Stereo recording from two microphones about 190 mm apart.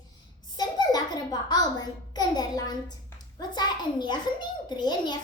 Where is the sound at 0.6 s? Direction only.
20° left (ahead or behind).